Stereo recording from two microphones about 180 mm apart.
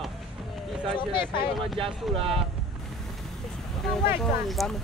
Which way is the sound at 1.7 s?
30° right (ahead or behind).